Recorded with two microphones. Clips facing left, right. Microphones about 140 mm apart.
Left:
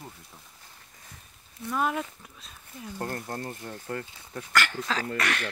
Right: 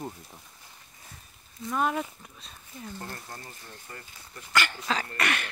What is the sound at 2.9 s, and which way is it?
Speech, 50° left (ahead or behind).